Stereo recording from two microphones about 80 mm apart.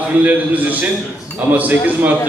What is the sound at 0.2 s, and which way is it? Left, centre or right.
A man's voice, right.